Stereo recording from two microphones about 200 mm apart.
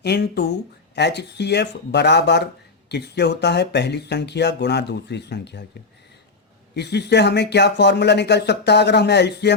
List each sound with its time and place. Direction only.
0.0 s speech: 55° left (ahead or behind)
6.7 s speech: 55° left (ahead or behind)